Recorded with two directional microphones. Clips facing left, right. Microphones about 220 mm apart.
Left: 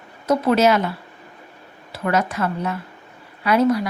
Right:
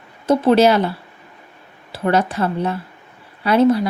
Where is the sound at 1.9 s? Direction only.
30° right (ahead or behind).